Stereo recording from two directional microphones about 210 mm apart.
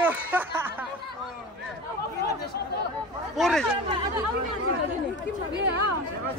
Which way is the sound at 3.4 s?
Centre (ahead or behind).